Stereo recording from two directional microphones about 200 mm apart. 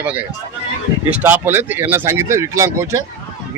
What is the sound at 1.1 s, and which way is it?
Speech, 10° right (ahead or behind).